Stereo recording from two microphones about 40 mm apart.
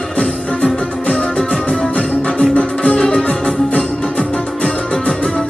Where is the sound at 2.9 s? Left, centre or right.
Centre.